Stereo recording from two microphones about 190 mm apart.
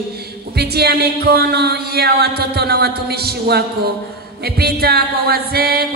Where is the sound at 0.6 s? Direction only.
55° right (ahead or behind).